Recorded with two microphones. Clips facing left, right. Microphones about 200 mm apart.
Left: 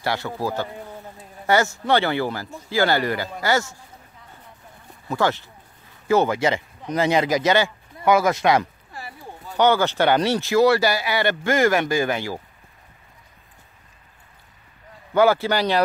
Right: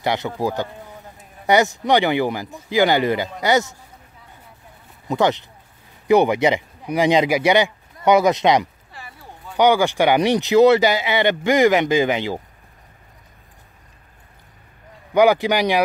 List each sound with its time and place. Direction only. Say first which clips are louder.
0.0 s a man's voice: right 3 dB; 20° right (ahead or behind)
5.0 s speech: right 3 dB; 20° right (ahead or behind)
15.1 s speech: right 2 dB; 15° right (ahead or behind)